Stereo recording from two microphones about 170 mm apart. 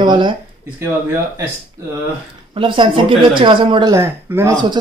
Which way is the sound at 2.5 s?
30° right (ahead or behind).